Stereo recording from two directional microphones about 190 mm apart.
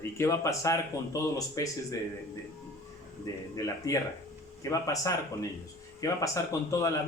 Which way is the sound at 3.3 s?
15° left (ahead or behind).